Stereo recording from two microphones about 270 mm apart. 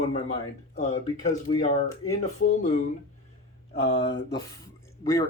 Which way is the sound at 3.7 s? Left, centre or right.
Left.